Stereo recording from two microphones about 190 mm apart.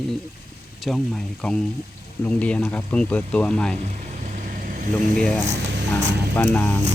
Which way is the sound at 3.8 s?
40° right (ahead or behind).